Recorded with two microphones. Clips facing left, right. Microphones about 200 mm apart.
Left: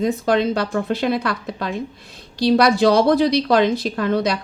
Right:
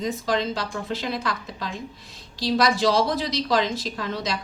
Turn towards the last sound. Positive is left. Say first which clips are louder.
# left 9 dB
turn(degrees=60)  # may be behind; listen again after turning